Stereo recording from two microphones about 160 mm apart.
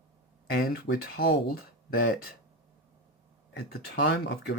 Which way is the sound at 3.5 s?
80° left.